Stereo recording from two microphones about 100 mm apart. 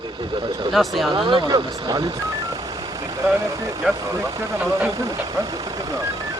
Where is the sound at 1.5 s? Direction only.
40° right (ahead or behind).